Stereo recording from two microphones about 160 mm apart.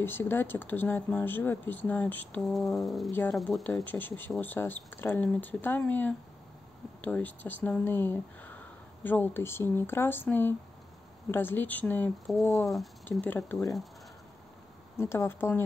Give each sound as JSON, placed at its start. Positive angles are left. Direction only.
{"t": 0.0, "sound": "speech", "side_deg": 15}
{"t": 3.1, "sound": "speech", "side_deg": 15}
{"t": 15.0, "sound": "speech", "side_deg": 15}